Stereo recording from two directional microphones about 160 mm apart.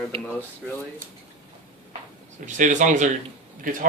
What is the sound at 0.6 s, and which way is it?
Speech, 5° right (ahead or behind).